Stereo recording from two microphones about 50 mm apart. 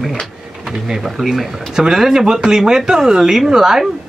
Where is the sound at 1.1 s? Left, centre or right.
Centre.